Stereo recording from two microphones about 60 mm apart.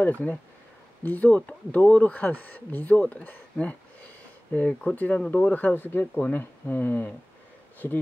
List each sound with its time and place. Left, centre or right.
0.0 s speech: left